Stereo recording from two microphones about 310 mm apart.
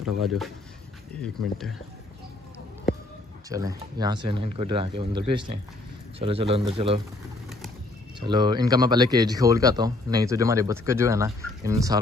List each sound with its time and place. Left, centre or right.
0.2 s speech: centre
3.4 s speech: centre
8.2 s speech: centre